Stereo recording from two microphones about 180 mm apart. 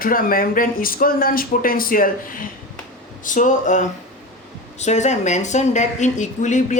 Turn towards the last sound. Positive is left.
turn(degrees=45)  # may be behind; listen again after turning